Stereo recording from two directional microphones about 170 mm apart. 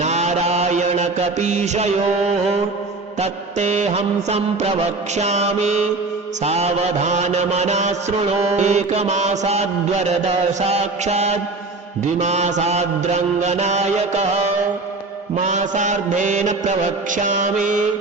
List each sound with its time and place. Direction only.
0.0 s mantra: 40° right (ahead or behind)